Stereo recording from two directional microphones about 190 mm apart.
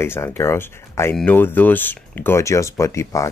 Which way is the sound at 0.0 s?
10° left (ahead or behind).